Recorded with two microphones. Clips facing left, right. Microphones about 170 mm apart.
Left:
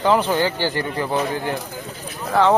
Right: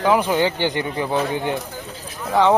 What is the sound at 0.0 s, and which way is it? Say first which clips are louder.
Speech: even; 10° right (ahead or behind).